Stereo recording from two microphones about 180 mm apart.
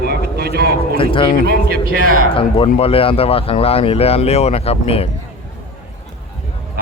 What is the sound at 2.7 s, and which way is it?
Speech, 30° left (ahead or behind).